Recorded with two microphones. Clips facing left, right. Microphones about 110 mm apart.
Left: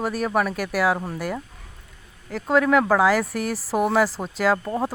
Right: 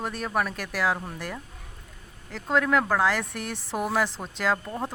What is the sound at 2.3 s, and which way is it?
Speech, 5° left (ahead or behind).